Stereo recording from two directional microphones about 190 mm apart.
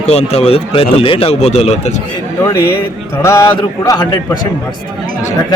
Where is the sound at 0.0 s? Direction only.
35° left (ahead or behind).